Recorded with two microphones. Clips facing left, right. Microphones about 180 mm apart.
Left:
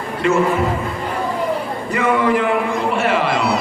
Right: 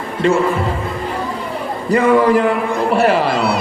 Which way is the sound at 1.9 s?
35° right (ahead or behind).